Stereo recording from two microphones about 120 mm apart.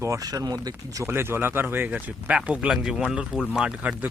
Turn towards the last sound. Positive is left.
turn(degrees=-10)  # may be behind; listen again after turning